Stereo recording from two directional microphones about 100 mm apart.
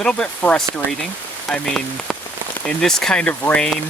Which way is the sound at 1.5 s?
5° left (ahead or behind).